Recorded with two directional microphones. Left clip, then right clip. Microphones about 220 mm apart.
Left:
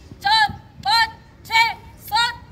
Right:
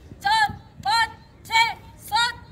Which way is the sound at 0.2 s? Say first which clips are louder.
Left 3 dB; 5° right (ahead or behind).